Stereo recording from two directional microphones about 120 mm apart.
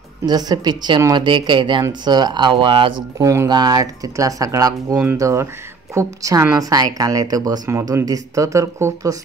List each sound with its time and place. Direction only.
0.2 s speech: 35° right (ahead or behind)
3.2 s speech: 25° right (ahead or behind)